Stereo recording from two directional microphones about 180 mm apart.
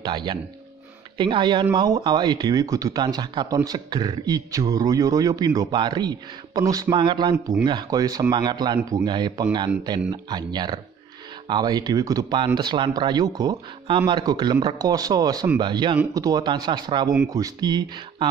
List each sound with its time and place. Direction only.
0.0 s speech: 25° right (ahead or behind)